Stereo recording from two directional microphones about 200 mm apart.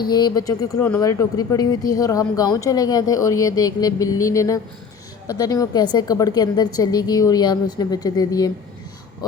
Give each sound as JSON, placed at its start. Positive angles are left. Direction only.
{"t": 0.0, "sound": "a woman's voice", "side_deg": 20}